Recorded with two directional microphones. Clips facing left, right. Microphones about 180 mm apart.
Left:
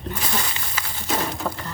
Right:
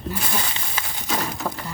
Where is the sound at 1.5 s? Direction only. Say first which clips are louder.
Even; 5° right (ahead or behind).